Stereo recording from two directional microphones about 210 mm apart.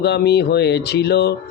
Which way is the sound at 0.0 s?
50° left (ahead or behind).